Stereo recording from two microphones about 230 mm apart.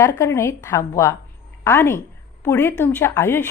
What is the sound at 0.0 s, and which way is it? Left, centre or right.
A woman's voice, centre.